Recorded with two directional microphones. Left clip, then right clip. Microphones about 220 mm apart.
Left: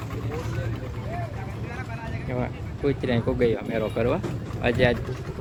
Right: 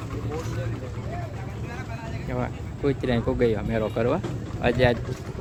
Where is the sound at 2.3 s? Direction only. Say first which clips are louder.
Even; centre (ahead or behind).